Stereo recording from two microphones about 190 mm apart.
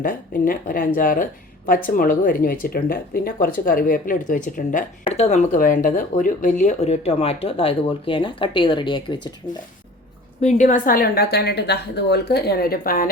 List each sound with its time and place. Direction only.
0.0 s speech: 45° left (ahead or behind); by 9.3 s 25° left (ahead or behind)
10.4 s a woman's voice: 40° left (ahead or behind)